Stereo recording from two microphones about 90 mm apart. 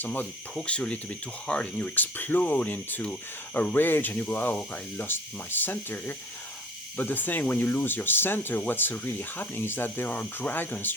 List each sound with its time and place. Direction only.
0.0 s speech: 20° left (ahead or behind)